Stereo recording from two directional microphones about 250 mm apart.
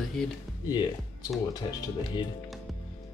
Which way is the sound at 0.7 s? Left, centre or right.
Centre.